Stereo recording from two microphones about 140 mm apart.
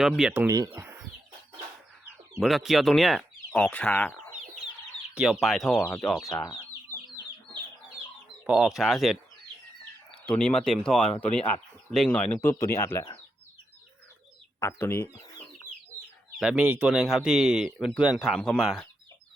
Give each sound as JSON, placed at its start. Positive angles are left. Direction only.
{"t": 0.2, "sound": "speech", "side_deg": -5}
{"t": 0.4, "sound": "speech", "side_deg": -25}
{"t": 2.4, "sound": "a man's voice", "side_deg": 0}
{"t": 5.1, "sound": "a man's voice", "side_deg": -5}
{"t": 6.2, "sound": "chicken", "side_deg": 25}
{"t": 8.4, "sound": "a man's voice", "side_deg": -5}
{"t": 10.2, "sound": "a man's voice", "side_deg": 5}
{"t": 14.6, "sound": "speech", "side_deg": 15}
{"t": 16.3, "sound": "a man's voice", "side_deg": -5}